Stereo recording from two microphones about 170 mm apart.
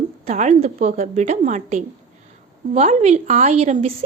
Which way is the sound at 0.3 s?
40° right (ahead or behind).